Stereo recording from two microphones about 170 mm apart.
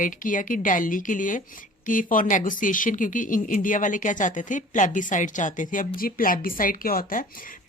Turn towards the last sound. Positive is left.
turn(degrees=55)  # may be behind; listen again after turning